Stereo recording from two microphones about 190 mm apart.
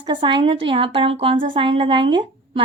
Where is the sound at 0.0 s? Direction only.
25° right (ahead or behind).